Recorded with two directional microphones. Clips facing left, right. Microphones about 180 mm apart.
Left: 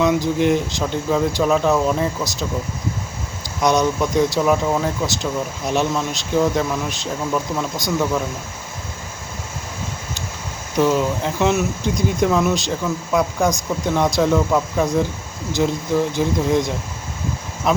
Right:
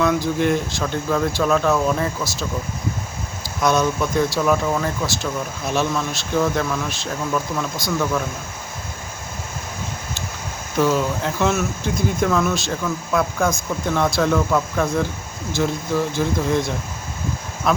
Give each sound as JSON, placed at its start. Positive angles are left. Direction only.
{"t": 0.0, "sound": "speech", "side_deg": 15}
{"t": 3.6, "sound": "speech", "side_deg": 20}
{"t": 10.8, "sound": "speech", "side_deg": 15}